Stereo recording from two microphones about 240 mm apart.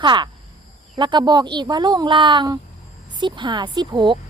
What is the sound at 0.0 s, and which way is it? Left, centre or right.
Speech, centre.